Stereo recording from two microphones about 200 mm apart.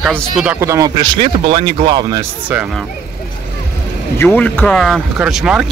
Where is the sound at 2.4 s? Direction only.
5° right (ahead or behind).